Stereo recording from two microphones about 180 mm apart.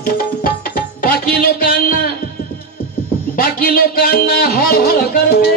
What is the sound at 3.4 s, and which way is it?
Music, 55° left (ahead or behind).